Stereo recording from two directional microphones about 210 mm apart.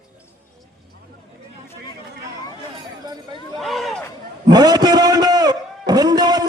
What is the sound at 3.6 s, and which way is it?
Chatter, centre (ahead or behind).